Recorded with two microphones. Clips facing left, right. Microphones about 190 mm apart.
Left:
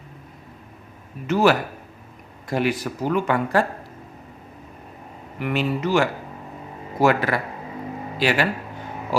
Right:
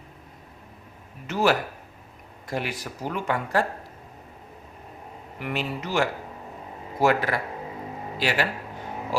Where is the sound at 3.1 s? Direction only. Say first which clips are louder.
Left 5 dB; 90° left.